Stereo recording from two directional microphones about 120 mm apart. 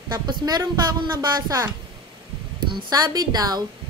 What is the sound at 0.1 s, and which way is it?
Speech, 35° right (ahead or behind).